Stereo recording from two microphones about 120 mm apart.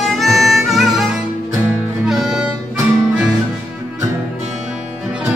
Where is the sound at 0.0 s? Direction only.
Centre (ahead or behind).